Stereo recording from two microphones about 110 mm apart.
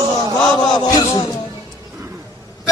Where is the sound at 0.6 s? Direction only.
40° left (ahead or behind).